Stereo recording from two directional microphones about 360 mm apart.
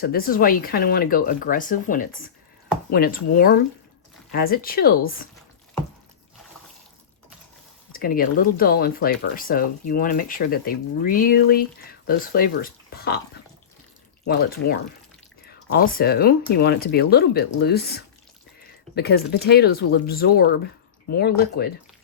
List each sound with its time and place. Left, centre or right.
0.0 s speech: left
7.9 s speech: left
14.3 s speech: left